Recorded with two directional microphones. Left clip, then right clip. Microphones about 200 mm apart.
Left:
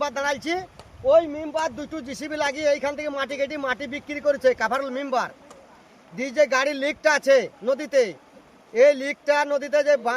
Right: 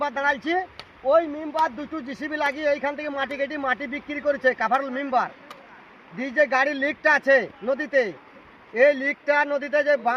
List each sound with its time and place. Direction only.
0.0 s speech: 25° left (ahead or behind)